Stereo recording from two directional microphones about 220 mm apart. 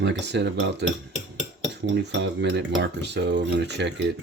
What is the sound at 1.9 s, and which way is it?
Speech, 50° right (ahead or behind).